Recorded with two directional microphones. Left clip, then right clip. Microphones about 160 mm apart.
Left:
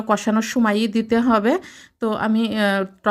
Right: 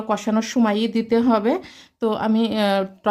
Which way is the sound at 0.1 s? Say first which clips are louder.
Left 2 dB; 30° left (ahead or behind).